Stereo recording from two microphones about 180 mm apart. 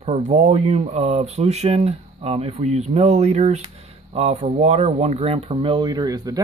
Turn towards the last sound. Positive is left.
turn(degrees=-20)  # may be behind; listen again after turning